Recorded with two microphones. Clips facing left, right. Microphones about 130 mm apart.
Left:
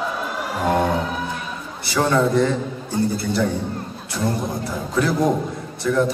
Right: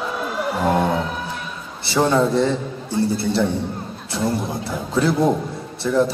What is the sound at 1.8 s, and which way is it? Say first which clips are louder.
A man's voice: right 1 dB; 30° right (ahead or behind).